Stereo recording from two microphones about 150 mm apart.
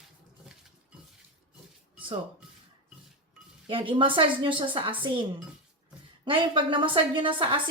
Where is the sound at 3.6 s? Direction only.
35° right (ahead or behind).